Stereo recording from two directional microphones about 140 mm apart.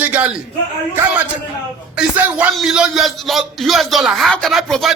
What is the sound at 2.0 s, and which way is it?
Speech, 10° right (ahead or behind).